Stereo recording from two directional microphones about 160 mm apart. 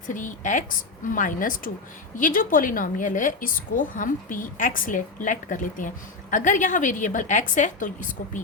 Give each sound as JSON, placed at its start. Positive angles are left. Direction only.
{"t": 0.1, "sound": "a woman's voice", "side_deg": 50}